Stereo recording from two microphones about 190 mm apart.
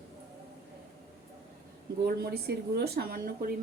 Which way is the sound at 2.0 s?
55° right (ahead or behind).